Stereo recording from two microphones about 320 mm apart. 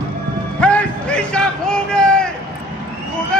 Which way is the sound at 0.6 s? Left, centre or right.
Centre.